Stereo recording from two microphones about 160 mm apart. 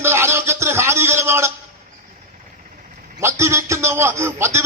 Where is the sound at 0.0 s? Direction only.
15° right (ahead or behind).